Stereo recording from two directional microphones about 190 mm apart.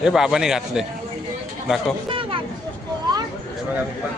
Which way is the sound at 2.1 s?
25° right (ahead or behind).